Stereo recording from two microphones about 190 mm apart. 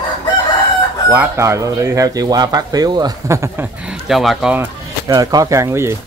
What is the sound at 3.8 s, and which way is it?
Speech, centre (ahead or behind).